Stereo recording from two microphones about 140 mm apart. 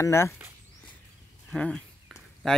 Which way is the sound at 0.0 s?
20° left (ahead or behind).